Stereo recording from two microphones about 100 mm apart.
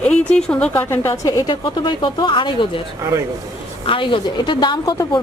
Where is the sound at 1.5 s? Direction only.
50° left (ahead or behind).